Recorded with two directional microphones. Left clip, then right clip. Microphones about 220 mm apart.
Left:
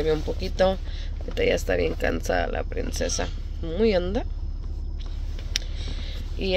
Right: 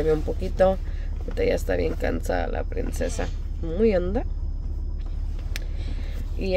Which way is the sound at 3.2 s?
5° right (ahead or behind).